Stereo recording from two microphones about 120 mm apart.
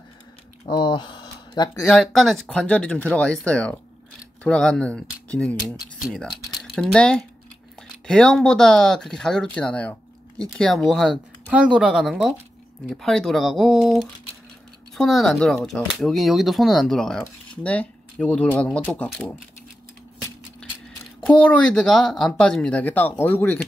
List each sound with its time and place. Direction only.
0.7 s speech: 35° left (ahead or behind)
1.9 s speech: centre (ahead or behind)
20.6 s a sound: 10° left (ahead or behind)
21.3 s speech: 10° left (ahead or behind)